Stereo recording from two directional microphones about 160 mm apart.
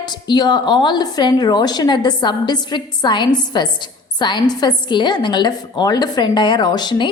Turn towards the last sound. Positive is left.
turn(degrees=25)  # may be behind; listen again after turning